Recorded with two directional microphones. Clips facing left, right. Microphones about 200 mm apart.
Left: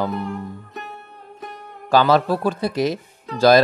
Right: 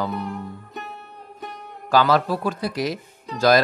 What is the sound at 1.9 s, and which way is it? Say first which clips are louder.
Speech: left 3 dB; 25° left (ahead or behind).